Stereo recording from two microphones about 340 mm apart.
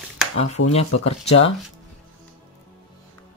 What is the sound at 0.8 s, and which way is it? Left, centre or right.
Speech, left.